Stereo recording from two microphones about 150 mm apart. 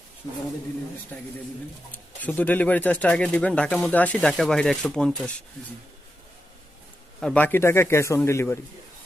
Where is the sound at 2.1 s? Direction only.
10° left (ahead or behind).